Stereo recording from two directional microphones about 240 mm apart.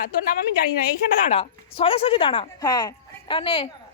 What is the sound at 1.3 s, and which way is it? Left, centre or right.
Speech, left.